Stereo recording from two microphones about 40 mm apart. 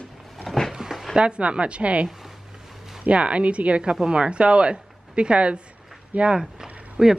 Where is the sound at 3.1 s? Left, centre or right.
Right.